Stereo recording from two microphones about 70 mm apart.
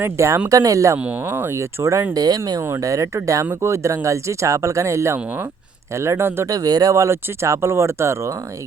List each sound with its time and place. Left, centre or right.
0.0 s speech: right
0.4 s speech: right
0.9 s speech: centre
1.2 s speech: right
2.1 s speech: right
2.6 s speech: right
3.4 s speech: right
6.5 s speech: right
6.9 s speech: right